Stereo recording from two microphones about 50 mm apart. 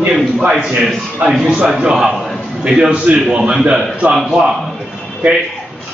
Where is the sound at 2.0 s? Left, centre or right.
Centre; by 3.4 s right.